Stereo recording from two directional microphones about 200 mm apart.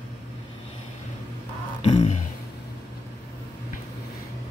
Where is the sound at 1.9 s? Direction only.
35° left (ahead or behind).